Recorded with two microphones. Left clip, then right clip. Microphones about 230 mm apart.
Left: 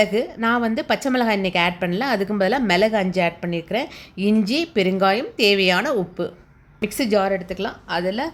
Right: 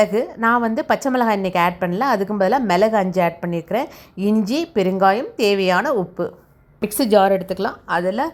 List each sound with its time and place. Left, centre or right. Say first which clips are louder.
0.0 s a woman's voice: right 2 dB; centre
6.8 s a woman's voice: right 5 dB; centre